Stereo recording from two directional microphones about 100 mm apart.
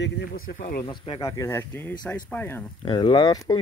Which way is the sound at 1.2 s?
30° left (ahead or behind).